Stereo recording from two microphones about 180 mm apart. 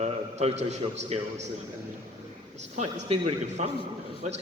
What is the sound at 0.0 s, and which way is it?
A man's voice, 40° right (ahead or behind).